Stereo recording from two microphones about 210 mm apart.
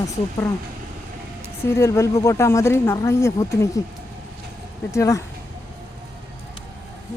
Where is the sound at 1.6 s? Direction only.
15° left (ahead or behind).